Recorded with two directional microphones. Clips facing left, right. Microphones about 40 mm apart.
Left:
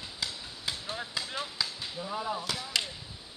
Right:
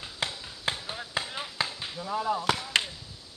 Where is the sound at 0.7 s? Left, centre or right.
Right.